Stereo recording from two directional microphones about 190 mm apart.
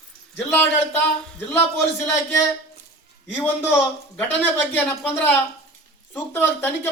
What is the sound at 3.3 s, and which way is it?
Speech, 10° left (ahead or behind).